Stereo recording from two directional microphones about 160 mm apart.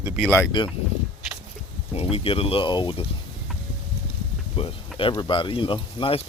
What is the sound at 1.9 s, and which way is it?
Speech, 40° left (ahead or behind).